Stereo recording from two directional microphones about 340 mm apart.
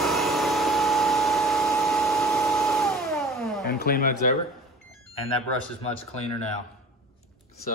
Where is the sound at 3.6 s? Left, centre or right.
Left.